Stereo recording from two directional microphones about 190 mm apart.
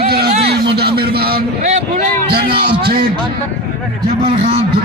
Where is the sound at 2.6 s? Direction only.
55° right (ahead or behind).